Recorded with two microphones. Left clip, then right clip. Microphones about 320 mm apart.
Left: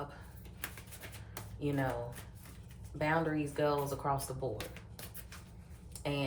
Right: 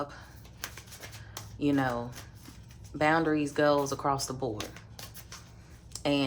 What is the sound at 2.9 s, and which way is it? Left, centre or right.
Speech, right.